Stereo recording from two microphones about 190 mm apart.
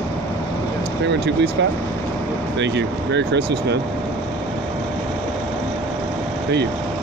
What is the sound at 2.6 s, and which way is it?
Speech, 65° right (ahead or behind).